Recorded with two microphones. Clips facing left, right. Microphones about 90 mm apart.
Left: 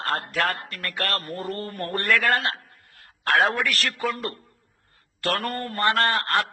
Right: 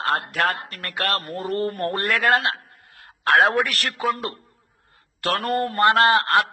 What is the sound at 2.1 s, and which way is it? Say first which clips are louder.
Speech: right 2 dB; 50° right (ahead or behind).